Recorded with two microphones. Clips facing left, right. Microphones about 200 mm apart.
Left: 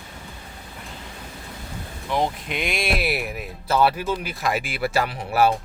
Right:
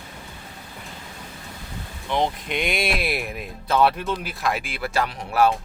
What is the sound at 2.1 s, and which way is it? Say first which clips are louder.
Speech: even; 5° left (ahead or behind).